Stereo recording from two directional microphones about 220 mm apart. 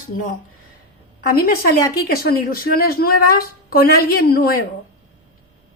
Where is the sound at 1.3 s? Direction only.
45° left (ahead or behind).